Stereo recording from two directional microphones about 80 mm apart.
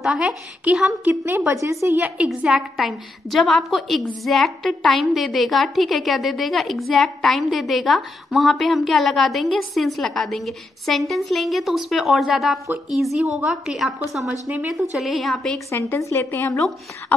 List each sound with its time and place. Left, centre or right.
0.0 s a woman's voice: centre
0.7 s a woman's voice: centre
1.5 s a woman's voice: right
2.0 s a woman's voice: centre
2.2 s a woman's voice: centre
15.7 s speech: left